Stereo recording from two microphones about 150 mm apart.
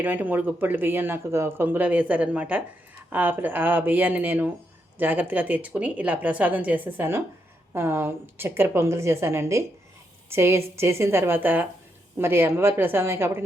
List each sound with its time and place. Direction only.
0.0 s speech: 10° right (ahead or behind)